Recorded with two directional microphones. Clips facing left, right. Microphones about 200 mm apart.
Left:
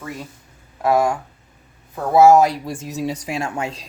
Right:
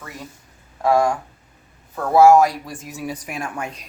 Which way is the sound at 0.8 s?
5° left (ahead or behind).